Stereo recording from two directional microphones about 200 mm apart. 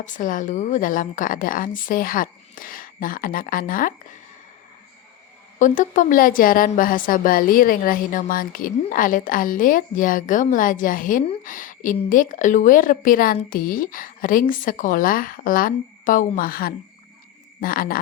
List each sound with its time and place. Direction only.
0.0 s a woman's voice: 40° left (ahead or behind)
5.5 s a woman's voice: 40° left (ahead or behind)